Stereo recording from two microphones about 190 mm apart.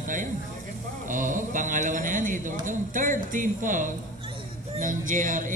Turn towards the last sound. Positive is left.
turn(degrees=-45)  # may be behind; listen again after turning